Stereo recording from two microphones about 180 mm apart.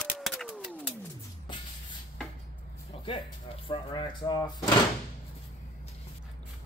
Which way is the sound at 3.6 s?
25° left (ahead or behind).